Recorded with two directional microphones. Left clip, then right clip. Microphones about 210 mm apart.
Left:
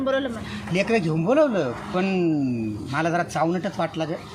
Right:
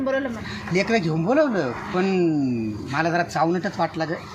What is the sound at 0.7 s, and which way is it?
A man's voice, 20° left (ahead or behind).